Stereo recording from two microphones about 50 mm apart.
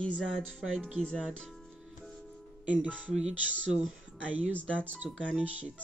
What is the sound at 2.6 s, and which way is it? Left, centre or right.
Speech, right.